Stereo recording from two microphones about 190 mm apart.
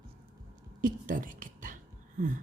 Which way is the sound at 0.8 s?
45° right (ahead or behind).